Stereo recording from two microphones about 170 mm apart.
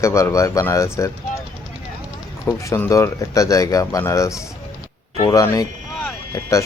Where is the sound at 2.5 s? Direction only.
15° left (ahead or behind).